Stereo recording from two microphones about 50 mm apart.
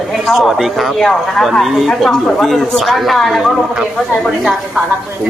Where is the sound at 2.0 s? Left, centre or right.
Centre.